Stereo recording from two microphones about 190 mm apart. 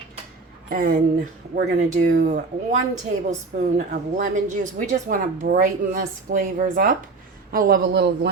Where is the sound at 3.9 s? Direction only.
40° right (ahead or behind); by 8.3 s 60° right (ahead or behind).